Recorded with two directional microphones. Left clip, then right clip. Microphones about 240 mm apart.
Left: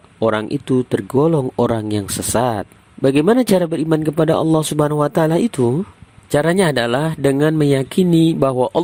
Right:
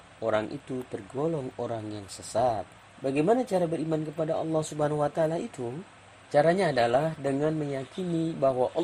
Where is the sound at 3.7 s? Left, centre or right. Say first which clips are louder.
Left 13 dB; left.